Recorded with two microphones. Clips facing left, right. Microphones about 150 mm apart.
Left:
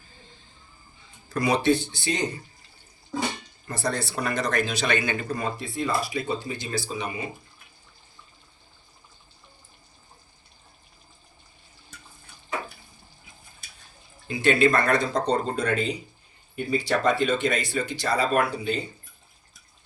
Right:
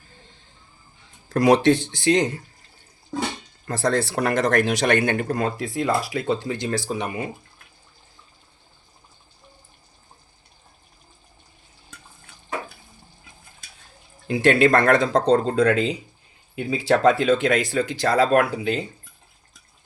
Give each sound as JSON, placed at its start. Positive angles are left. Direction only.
{"t": 1.3, "sound": "speech", "side_deg": -90}
{"t": 3.7, "sound": "speech", "side_deg": -90}
{"t": 14.3, "sound": "speech", "side_deg": -75}